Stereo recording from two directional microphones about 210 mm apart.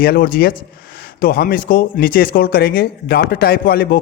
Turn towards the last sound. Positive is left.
turn(degrees=45)  # may be behind; listen again after turning